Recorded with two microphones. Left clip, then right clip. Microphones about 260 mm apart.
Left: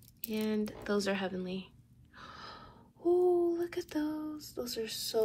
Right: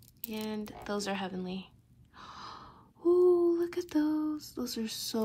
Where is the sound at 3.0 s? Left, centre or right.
Right.